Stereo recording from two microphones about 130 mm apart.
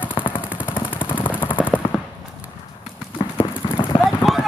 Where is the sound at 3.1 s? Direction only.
40° left (ahead or behind).